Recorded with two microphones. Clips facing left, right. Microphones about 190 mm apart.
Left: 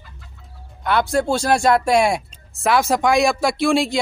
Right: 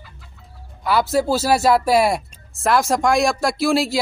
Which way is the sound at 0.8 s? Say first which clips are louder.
Right 1 dB; 5° right (ahead or behind).